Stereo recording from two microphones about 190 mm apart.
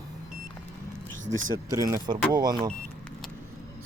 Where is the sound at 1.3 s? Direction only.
90° right.